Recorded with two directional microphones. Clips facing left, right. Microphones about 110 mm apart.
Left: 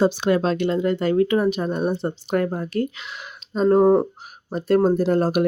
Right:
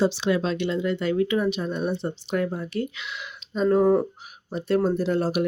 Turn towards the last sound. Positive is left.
turn(degrees=45)  # may be behind; listen again after turning